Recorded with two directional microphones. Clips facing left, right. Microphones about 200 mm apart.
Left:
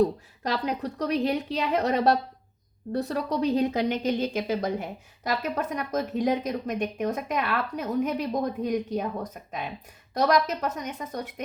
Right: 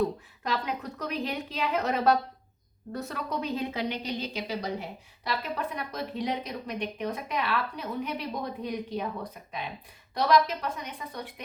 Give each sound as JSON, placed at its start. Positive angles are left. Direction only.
{"t": 0.0, "sound": "a woman's voice", "side_deg": 35}